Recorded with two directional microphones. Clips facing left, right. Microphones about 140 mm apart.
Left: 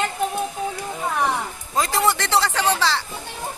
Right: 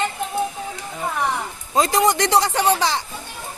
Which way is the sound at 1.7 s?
20° right (ahead or behind).